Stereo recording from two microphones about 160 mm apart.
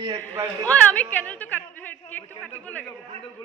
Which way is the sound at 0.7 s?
10° left (ahead or behind).